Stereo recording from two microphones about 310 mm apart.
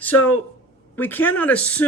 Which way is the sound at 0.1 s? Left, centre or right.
Left.